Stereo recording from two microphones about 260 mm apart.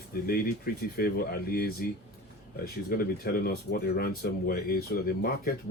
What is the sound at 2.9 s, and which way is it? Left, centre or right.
Speech, left.